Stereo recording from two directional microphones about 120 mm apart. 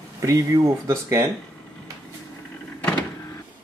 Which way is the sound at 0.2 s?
30° right (ahead or behind).